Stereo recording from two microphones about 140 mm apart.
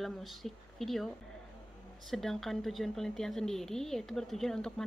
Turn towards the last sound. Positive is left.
turn(degrees=5)  # may be behind; listen again after turning